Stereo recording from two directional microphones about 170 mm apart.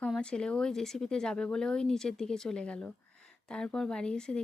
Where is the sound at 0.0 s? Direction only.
5° left (ahead or behind).